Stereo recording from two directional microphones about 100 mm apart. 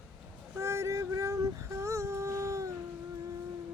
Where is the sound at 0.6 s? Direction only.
30° right (ahead or behind).